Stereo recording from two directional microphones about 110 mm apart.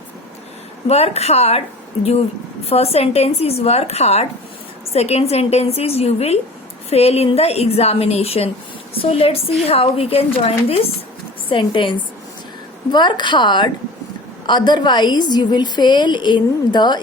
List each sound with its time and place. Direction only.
0.9 s speech: 70° left (ahead or behind)
2.6 s speech: 65° left (ahead or behind)
11.4 s a woman's voice: 50° left (ahead or behind)